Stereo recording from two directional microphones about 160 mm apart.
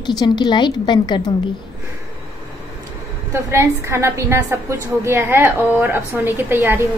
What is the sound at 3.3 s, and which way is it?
A woman's voice, 15° right (ahead or behind).